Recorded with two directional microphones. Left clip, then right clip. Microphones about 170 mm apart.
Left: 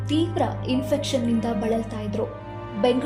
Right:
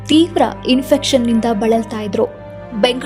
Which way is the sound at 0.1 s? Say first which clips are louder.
Right 11 dB; 40° right (ahead or behind).